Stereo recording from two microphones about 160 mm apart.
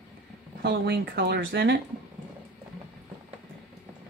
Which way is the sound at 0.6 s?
90° right.